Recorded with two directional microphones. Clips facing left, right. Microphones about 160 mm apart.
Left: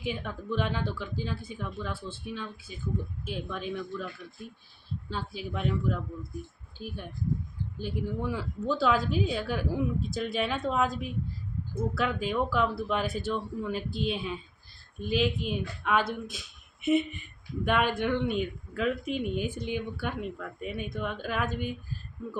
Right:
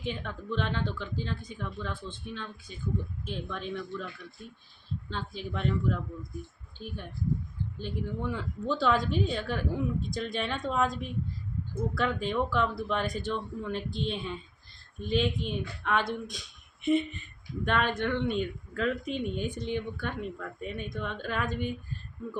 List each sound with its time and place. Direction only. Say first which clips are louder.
0.0 s a woman's voice: left 1 dB; 10° left (ahead or behind)